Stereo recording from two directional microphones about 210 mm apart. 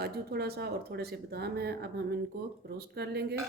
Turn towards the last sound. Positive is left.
turn(degrees=-50)  # may be behind; listen again after turning